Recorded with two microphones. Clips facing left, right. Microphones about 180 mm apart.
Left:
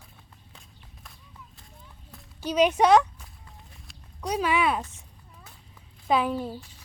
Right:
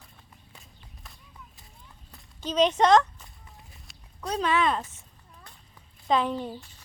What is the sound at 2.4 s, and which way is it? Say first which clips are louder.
Speech: left 1 dB; 10° left (ahead or behind).